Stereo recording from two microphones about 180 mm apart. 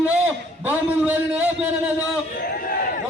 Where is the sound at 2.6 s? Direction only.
50° left (ahead or behind).